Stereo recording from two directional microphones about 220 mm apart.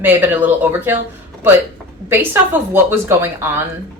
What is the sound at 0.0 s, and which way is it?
Speech, 10° right (ahead or behind).